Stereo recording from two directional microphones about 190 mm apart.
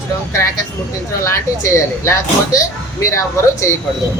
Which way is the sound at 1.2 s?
15° left (ahead or behind).